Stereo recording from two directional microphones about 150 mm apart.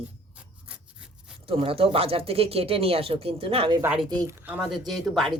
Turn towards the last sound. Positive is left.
turn(degrees=0)  # may be behind; listen again after turning